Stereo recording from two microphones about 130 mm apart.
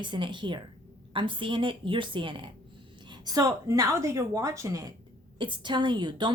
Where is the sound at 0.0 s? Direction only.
35° right (ahead or behind).